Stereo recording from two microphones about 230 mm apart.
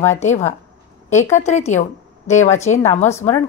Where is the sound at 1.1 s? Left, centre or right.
Centre.